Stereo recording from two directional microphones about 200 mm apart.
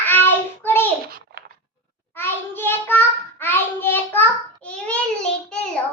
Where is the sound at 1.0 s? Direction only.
50° right (ahead or behind).